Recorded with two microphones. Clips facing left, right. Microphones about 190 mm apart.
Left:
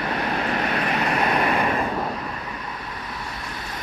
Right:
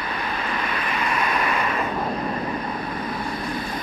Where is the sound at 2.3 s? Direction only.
45° right (ahead or behind).